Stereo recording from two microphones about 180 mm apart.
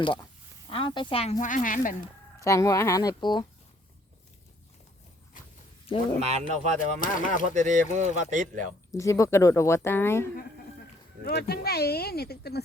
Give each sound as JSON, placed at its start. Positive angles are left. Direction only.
{"t": 0.7, "sound": "speech", "side_deg": 30}
{"t": 2.4, "sound": "speech", "side_deg": 15}
{"t": 6.1, "sound": "speech", "side_deg": -35}
{"t": 7.0, "sound": "speech", "side_deg": 45}
{"t": 7.5, "sound": "speech", "side_deg": -45}
{"t": 8.9, "sound": "a woman's voice", "side_deg": 15}
{"t": 11.2, "sound": "speech", "side_deg": 60}